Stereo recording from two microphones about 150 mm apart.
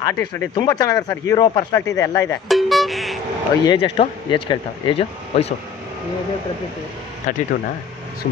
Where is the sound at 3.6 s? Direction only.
35° left (ahead or behind).